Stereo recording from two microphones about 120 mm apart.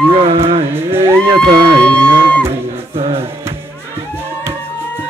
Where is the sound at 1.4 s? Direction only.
10° left (ahead or behind).